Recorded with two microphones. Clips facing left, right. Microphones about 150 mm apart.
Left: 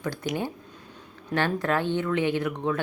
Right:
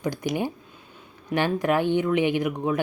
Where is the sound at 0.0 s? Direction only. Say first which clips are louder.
Right 3 dB; 15° right (ahead or behind).